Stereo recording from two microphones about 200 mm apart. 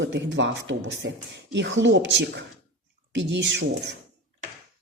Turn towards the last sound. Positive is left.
turn(degrees=-65)  # may be behind; listen again after turning